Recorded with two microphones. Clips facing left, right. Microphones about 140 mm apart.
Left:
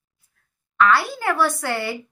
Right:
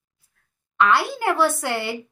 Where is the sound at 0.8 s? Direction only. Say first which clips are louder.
Left 1 dB; 20° right (ahead or behind).